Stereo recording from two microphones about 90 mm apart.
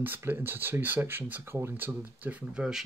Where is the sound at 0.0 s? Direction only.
20° right (ahead or behind).